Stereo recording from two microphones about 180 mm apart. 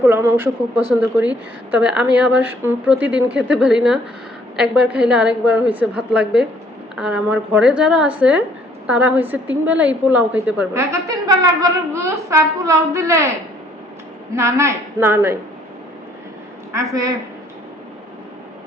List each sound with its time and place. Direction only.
0.0 s a woman's voice: 15° right (ahead or behind)
1.7 s a woman's voice: 5° right (ahead or behind)
10.9 s a woman's voice: 20° right (ahead or behind)
14.3 s a woman's voice: 15° right (ahead or behind)
16.7 s a woman's voice: 20° right (ahead or behind)